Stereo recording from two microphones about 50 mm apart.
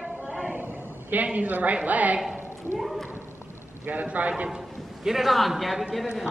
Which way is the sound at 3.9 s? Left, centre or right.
Right.